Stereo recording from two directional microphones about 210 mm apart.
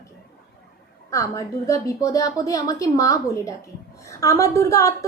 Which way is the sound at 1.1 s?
15° left (ahead or behind).